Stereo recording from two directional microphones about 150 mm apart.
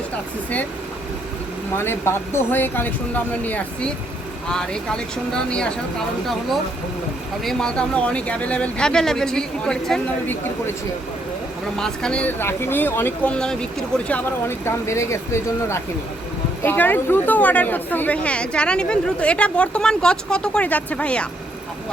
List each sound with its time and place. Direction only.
1.7 s speech: 15° left (ahead or behind)
7.4 s speech: 5° left (ahead or behind)
11.8 s speech: 5° left (ahead or behind)